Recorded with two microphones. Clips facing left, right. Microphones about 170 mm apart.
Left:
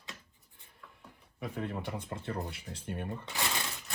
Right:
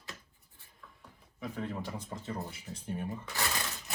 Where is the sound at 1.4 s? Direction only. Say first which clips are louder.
Even; 60° left (ahead or behind).